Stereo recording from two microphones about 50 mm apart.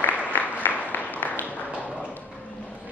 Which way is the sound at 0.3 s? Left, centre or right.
Left.